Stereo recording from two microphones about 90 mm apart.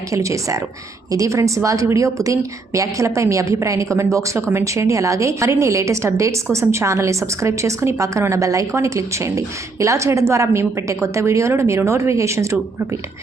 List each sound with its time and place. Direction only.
0.1 s a woman's voice: 35° right (ahead or behind)